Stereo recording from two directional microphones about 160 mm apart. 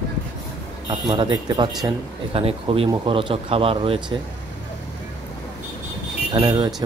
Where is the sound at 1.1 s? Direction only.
30° right (ahead or behind).